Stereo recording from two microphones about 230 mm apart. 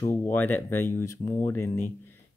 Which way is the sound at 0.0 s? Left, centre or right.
Centre.